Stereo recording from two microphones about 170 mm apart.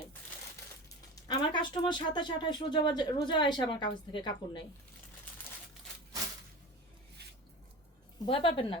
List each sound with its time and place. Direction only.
1.3 s speech: 25° left (ahead or behind)
8.3 s a woman's voice: 30° left (ahead or behind)